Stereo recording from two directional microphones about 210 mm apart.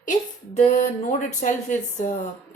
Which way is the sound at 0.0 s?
35° left (ahead or behind).